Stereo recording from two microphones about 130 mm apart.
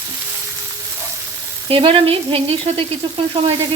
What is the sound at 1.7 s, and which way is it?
Frying, 45° right (ahead or behind).